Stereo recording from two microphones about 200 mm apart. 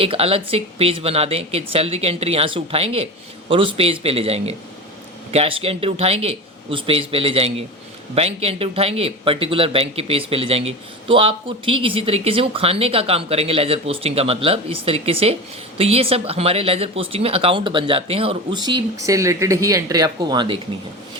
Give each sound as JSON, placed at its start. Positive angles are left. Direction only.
{"t": 0.0, "sound": "speech", "side_deg": -30}